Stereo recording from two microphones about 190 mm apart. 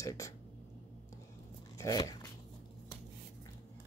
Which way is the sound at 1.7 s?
15° left (ahead or behind).